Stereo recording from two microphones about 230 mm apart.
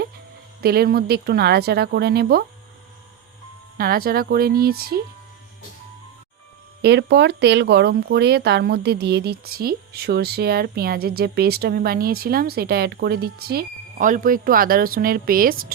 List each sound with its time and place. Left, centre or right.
0.6 s speech: right
3.8 s speech: right
6.8 s speech: right